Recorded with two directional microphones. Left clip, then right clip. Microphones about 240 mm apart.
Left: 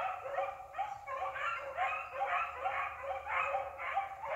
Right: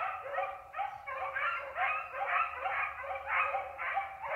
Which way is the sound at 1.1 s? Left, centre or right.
Centre.